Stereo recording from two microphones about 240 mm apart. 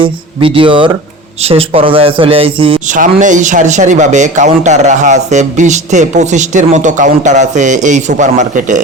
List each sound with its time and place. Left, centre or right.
0.0 s a man's voice: right